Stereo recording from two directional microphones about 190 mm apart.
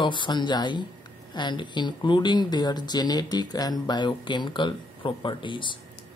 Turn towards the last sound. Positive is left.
turn(degrees=25)  # may be behind; listen again after turning